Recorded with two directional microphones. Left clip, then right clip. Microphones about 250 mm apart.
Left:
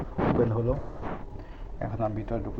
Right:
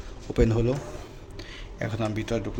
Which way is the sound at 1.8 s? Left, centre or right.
Right.